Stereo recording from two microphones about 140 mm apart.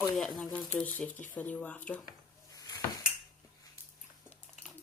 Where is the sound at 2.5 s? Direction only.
25° left (ahead or behind).